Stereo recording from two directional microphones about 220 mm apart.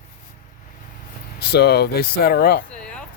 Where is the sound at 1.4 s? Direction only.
50° left (ahead or behind).